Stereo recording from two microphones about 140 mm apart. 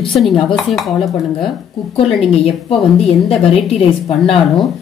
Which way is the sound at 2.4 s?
45° left (ahead or behind).